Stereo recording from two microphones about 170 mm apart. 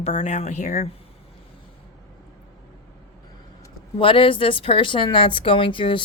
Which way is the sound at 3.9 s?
30° left (ahead or behind).